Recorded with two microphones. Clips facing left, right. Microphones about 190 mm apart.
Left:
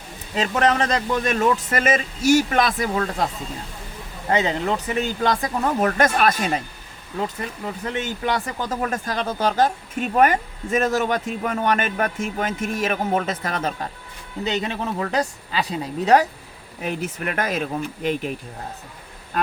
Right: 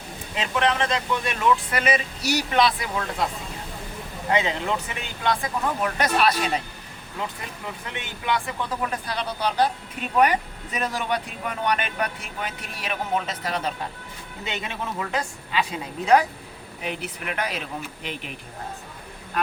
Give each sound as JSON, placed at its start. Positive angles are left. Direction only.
{"t": 0.3, "sound": "a man's voice", "side_deg": 40}
{"t": 4.3, "sound": "speech", "side_deg": 40}
{"t": 7.9, "sound": "a man's voice", "side_deg": 40}
{"t": 14.4, "sound": "a man's voice", "side_deg": 35}